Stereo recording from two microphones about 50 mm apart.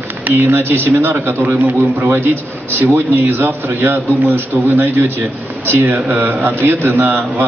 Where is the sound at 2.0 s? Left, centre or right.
Right.